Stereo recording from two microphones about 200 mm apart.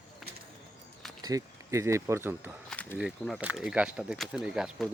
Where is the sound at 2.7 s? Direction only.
5° left (ahead or behind).